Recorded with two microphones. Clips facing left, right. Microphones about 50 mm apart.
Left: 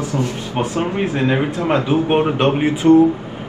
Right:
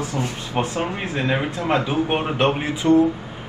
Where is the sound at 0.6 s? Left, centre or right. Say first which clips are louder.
Left 4 dB; left.